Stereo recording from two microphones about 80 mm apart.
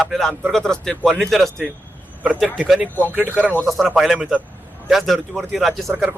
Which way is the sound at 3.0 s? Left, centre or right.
Right.